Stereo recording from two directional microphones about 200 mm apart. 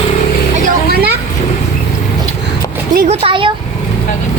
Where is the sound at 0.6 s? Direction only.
50° right (ahead or behind).